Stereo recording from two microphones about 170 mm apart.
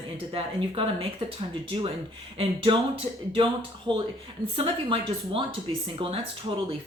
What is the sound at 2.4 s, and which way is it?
Speech, 30° right (ahead or behind).